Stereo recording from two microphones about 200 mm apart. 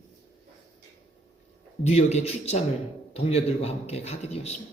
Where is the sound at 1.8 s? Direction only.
35° left (ahead or behind).